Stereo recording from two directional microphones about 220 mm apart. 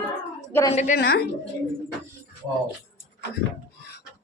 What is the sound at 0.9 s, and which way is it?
Speech, 45° left (ahead or behind).